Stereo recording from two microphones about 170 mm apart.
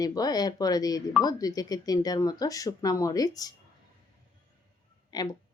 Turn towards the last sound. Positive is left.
turn(degrees=25)  # may be behind; listen again after turning